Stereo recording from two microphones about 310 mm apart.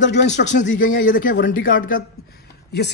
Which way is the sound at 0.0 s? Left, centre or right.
Left.